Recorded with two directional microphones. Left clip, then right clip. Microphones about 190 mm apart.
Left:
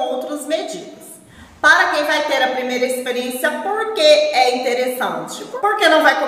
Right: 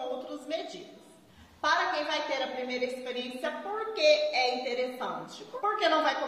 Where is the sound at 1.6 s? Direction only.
10° left (ahead or behind).